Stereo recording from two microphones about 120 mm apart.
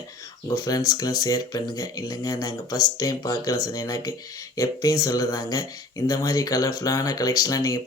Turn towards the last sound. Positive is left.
turn(degrees=30)  # may be behind; listen again after turning